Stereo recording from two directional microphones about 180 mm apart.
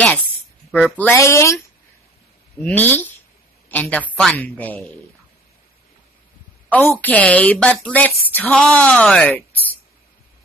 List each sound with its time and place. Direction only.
0.7 s a woman's voice: centre (ahead or behind)
6.7 s a woman's voice: 10° left (ahead or behind)